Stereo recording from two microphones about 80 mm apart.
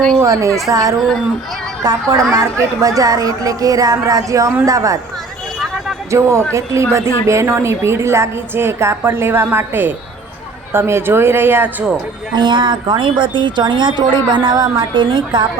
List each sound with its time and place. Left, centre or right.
0.2 s a woman's voice: right
6.1 s a woman's voice: right
12.3 s a woman's voice: right